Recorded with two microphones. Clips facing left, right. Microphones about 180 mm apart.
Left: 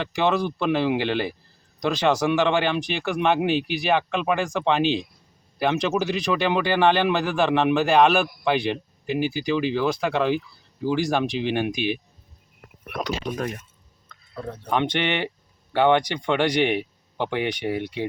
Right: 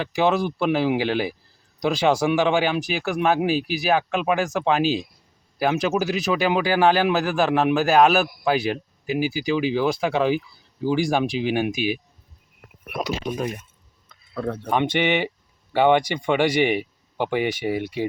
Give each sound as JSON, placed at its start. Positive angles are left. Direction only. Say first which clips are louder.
{"t": 0.0, "sound": "speech", "louder": "right 2 dB", "side_deg": -10}
{"t": 14.3, "sound": "speech", "louder": "right 7 dB", "side_deg": -70}
{"t": 14.7, "sound": "speech", "louder": "right 2 dB", "side_deg": -10}